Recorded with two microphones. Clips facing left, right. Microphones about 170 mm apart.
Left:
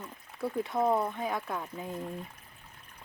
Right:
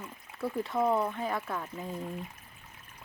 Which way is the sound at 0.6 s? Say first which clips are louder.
Even; 15° left (ahead or behind).